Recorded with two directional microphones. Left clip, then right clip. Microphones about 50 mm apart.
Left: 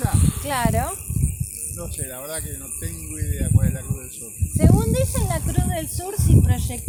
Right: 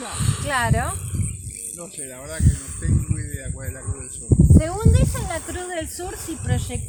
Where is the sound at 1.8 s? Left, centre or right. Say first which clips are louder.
Left 4 dB; left.